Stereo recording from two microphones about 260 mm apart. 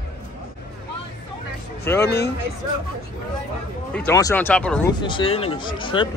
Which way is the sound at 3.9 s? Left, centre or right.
Centre.